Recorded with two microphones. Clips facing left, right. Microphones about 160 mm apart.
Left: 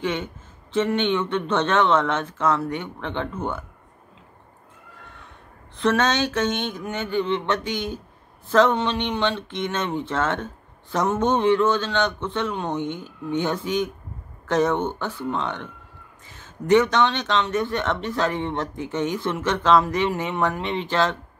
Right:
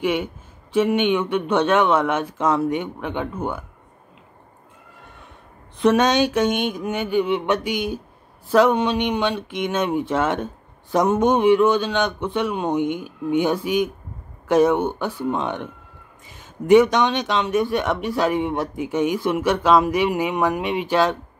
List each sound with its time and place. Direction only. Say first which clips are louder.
0.0 s speech: right 4 dB; 10° right (ahead or behind)
5.8 s speech: right 4 dB; 15° right (ahead or behind)